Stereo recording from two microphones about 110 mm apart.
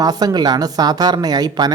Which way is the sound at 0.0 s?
35° right (ahead or behind).